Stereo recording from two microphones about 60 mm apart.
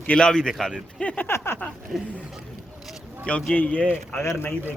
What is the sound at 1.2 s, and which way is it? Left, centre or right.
Speech, left.